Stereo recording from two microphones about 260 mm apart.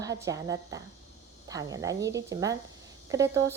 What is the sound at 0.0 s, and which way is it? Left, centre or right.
Speech, centre.